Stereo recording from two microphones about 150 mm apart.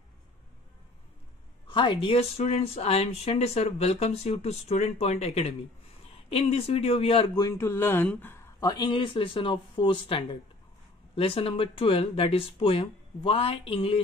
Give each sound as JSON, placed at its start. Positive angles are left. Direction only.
{"t": 1.7, "sound": "speech", "side_deg": 35}
{"t": 7.3, "sound": "speech", "side_deg": 20}